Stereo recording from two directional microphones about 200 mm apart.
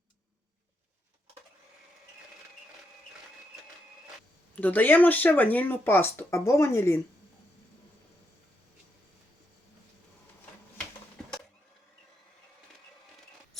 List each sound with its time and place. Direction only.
4.5 s speech: 10° left (ahead or behind)